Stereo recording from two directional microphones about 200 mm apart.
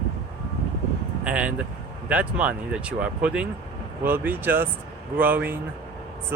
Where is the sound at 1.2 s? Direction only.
5° right (ahead or behind).